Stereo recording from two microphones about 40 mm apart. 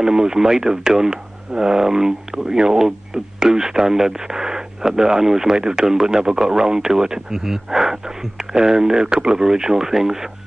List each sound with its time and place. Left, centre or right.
0.0 s speech: centre